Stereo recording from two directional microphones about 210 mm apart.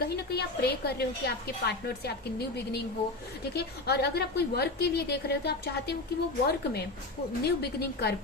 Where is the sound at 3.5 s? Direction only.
50° left (ahead or behind).